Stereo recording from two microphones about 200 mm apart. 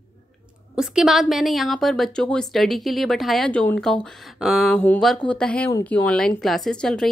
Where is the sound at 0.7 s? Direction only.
5° right (ahead or behind).